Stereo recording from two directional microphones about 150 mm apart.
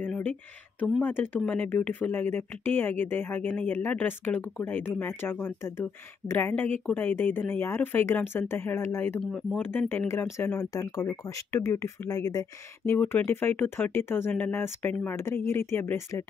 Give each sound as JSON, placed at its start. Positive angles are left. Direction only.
{"t": 0.0, "sound": "a sound", "side_deg": 10}
{"t": 1.0, "sound": "speech", "side_deg": 15}
{"t": 9.2, "sound": "speech", "side_deg": 0}
{"t": 9.6, "sound": "speech", "side_deg": 15}